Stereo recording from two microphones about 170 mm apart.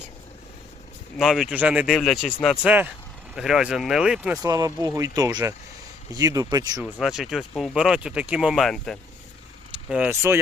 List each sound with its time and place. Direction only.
1.2 s speech: centre (ahead or behind)
4.4 s speech: 20° right (ahead or behind)
6.8 s speech: centre (ahead or behind)
9.9 s speech: 10° right (ahead or behind)